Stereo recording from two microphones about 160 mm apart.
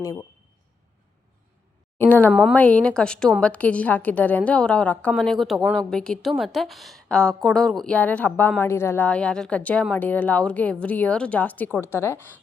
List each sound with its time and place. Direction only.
0.0 s speech: 20° left (ahead or behind)
2.0 s a woman's voice: 10° left (ahead or behind)